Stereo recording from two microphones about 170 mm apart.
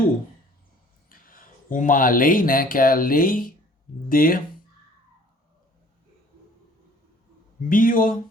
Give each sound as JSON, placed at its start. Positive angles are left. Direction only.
{"t": 1.1, "sound": "speech", "side_deg": 55}
{"t": 7.7, "sound": "speech", "side_deg": 55}